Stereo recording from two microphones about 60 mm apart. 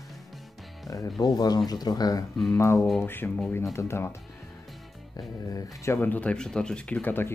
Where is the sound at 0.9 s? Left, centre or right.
Left.